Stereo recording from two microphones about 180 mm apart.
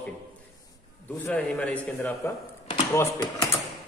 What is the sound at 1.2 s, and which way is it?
A man's voice, 10° left (ahead or behind).